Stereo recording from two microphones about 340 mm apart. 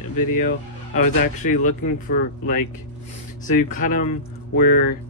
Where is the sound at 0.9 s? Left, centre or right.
Left.